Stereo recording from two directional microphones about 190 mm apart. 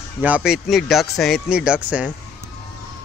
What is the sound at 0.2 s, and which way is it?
Speech, 5° right (ahead or behind).